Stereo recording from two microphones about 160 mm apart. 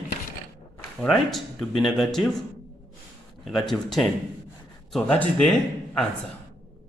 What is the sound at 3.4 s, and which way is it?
A man's voice, centre (ahead or behind).